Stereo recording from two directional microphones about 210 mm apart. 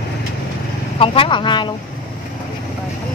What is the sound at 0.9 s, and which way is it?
Speech, 25° left (ahead or behind).